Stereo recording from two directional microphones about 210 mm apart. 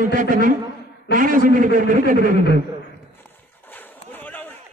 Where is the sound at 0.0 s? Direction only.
40° right (ahead or behind).